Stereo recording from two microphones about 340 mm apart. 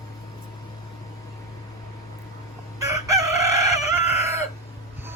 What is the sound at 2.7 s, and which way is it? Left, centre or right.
Chicken, centre.